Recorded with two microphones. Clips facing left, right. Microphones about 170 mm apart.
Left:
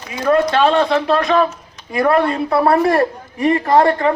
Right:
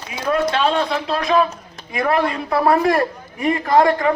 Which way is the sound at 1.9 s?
40° left (ahead or behind).